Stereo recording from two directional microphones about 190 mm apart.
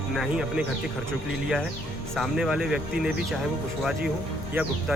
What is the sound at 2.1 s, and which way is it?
Speech, centre (ahead or behind).